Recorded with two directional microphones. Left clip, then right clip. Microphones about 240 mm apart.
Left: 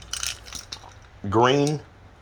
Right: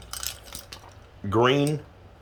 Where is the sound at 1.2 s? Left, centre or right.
Centre.